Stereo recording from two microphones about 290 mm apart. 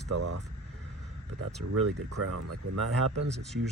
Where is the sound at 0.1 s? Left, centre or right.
Right.